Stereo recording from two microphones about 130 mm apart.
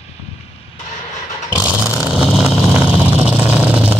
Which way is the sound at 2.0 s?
5° right (ahead or behind).